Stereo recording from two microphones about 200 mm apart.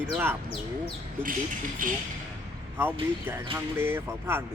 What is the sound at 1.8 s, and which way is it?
Speech, 45° right (ahead or behind).